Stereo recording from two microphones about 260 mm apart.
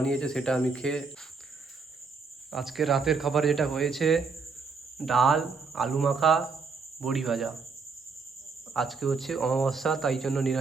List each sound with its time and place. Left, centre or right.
0.0 s speech: centre
2.5 s speech: centre
8.7 s speech: centre